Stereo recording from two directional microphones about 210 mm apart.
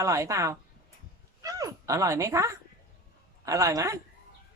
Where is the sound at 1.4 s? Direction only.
15° right (ahead or behind).